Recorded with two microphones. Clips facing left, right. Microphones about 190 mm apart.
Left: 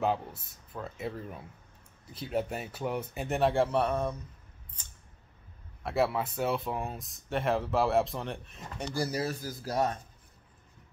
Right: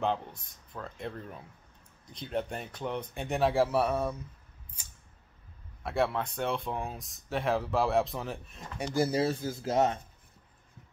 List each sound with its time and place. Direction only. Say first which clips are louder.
0.0 s speech: left 1 dB; 5° left (ahead or behind)
4.8 s a sound: even; 10° right (ahead or behind)
5.9 s speech: left 1 dB; 5° left (ahead or behind)
8.8 s speech: right 4 dB; 20° right (ahead or behind)